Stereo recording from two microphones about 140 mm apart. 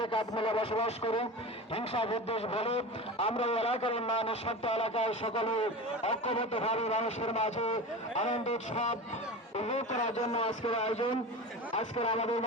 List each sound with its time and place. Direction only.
0.0 s a man's voice: 40° left (ahead or behind)